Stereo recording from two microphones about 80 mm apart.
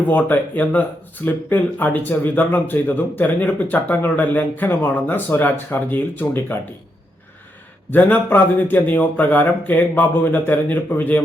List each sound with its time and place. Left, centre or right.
0.1 s speech: left
7.9 s speech: left